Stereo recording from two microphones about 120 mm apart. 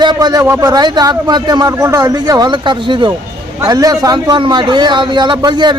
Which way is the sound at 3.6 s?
30° right (ahead or behind).